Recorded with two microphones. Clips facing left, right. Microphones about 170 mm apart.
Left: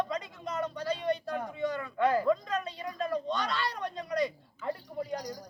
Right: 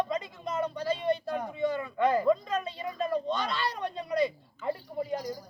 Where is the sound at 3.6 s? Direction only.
25° right (ahead or behind).